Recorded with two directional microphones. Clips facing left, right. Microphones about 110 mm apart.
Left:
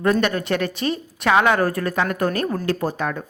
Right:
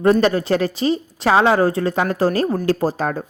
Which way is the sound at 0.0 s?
30° right (ahead or behind).